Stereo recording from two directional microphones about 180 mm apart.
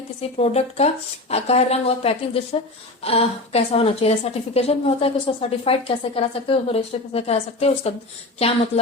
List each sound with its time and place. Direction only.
0.2 s a woman's voice: 35° left (ahead or behind)